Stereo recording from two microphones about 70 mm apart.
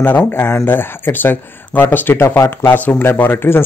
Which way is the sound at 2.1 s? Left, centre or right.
Left.